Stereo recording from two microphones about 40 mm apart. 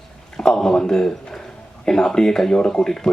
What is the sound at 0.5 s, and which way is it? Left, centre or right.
A man's voice, centre.